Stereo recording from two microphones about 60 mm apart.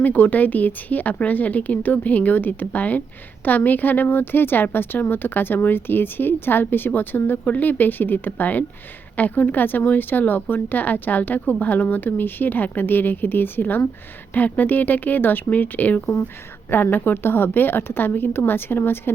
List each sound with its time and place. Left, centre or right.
0.0 s a woman's voice: left